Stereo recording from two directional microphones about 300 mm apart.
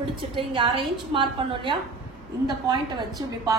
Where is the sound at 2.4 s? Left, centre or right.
Centre.